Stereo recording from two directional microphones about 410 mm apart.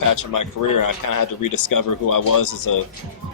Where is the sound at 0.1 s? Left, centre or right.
Left.